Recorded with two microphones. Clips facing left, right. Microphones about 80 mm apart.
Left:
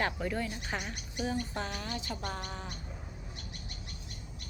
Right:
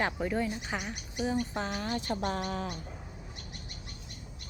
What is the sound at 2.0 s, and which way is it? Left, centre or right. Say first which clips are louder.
Speech: right 6 dB; right.